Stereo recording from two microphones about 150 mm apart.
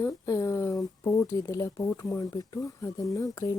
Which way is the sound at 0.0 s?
20° left (ahead or behind).